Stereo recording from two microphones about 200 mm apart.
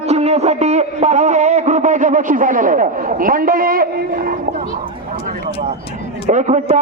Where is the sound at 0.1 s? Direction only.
30° right (ahead or behind).